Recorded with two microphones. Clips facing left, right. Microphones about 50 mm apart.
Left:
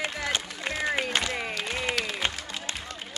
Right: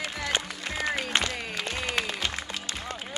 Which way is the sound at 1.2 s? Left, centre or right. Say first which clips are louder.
Left 1 dB; centre.